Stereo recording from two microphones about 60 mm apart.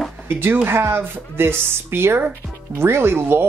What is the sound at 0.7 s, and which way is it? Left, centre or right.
Speech, right.